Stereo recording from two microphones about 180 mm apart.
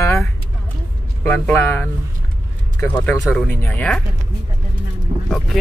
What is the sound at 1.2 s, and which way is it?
Speech, 10° left (ahead or behind).